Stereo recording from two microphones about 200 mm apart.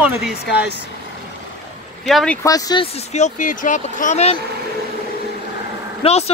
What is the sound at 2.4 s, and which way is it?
Speech, 15° left (ahead or behind).